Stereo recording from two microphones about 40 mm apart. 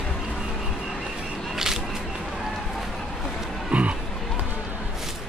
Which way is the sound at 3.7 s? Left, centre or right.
Right.